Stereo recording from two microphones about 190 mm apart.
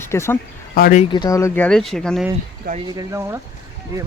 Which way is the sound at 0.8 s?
50° left (ahead or behind).